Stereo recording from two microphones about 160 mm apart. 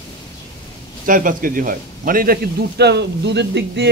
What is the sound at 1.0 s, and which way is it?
A man's voice, 60° right (ahead or behind).